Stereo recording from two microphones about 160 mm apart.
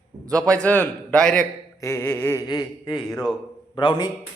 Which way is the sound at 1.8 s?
15° left (ahead or behind).